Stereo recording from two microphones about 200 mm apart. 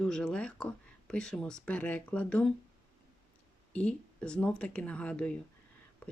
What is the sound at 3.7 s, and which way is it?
Speech, 5° left (ahead or behind).